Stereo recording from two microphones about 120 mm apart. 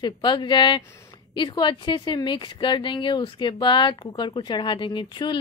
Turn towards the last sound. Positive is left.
turn(degrees=40)  # may be behind; listen again after turning